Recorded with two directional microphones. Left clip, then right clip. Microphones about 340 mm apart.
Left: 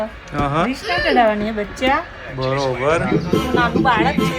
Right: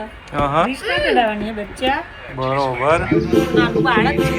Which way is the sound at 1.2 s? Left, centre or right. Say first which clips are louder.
Left 2 dB; centre.